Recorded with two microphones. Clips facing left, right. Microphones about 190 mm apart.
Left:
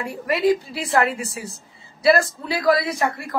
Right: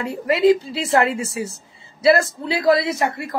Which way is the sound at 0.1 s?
25° right (ahead or behind).